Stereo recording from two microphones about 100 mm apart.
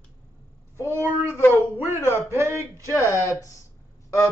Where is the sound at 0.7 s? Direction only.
25° right (ahead or behind).